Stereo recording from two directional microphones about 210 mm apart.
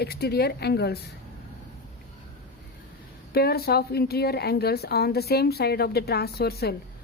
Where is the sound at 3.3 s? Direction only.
50° left (ahead or behind).